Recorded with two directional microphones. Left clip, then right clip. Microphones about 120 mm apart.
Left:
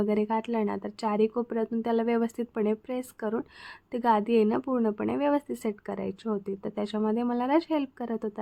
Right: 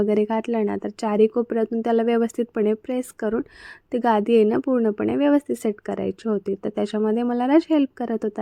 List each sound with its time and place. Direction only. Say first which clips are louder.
0.0 s a woman's voice: right 6 dB; 35° right (ahead or behind)